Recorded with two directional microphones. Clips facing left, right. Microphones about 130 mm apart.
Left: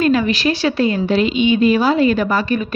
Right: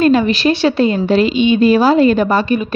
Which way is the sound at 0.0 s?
30° right (ahead or behind).